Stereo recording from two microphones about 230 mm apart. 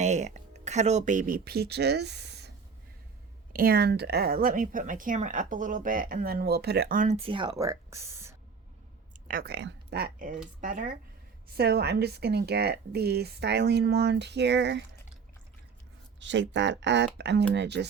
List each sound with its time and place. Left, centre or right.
0.0 s speech: right
3.5 s a woman's voice: right; by 8.4 s centre
9.2 s a woman's voice: right
16.2 s speech: right